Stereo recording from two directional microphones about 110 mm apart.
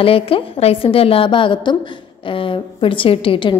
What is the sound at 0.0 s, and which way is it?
A woman's voice, 60° left (ahead or behind).